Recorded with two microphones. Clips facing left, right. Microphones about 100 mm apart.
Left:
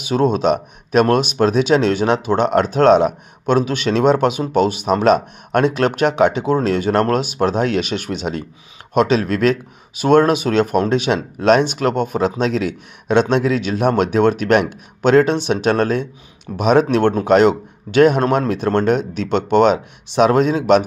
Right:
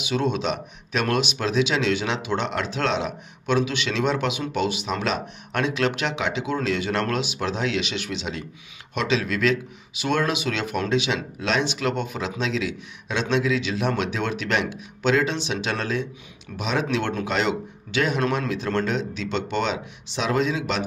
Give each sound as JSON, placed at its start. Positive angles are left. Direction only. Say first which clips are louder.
{"t": 0.0, "sound": "speech", "louder": "left 8 dB", "side_deg": 45}